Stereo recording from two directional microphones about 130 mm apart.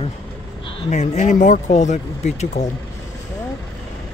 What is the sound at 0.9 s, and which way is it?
Speech, 65° left (ahead or behind).